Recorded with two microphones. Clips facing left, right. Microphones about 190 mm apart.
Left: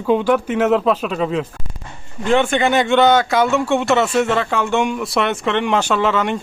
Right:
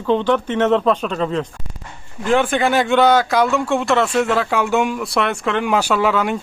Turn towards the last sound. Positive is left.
turn(degrees=-5)  # may be behind; listen again after turning